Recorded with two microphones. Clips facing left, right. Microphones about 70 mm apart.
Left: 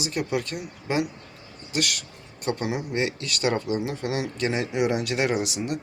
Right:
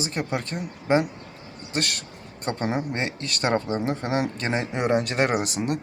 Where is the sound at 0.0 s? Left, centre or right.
Right.